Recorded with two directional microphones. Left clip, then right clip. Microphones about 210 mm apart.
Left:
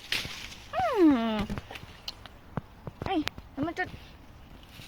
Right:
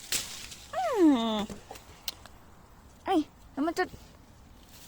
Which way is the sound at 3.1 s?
55° right (ahead or behind).